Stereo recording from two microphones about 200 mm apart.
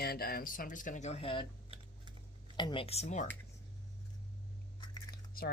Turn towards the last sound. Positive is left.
turn(degrees=50)  # may be behind; listen again after turning